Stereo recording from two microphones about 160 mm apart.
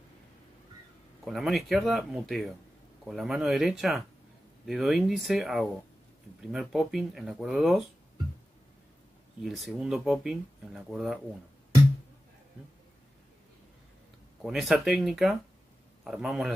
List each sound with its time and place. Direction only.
1.2 s speech: centre (ahead or behind)
9.4 s speech: centre (ahead or behind)
14.4 s speech: centre (ahead or behind)